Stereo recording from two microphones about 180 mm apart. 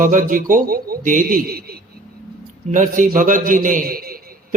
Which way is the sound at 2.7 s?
45° right (ahead or behind).